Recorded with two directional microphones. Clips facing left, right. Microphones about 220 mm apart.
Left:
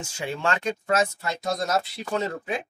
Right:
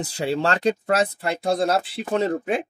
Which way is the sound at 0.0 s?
35° right (ahead or behind).